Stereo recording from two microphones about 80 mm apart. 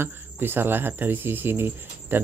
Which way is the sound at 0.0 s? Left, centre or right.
Right.